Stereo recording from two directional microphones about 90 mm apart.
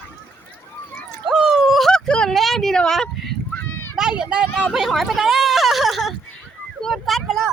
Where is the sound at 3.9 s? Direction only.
5° right (ahead or behind).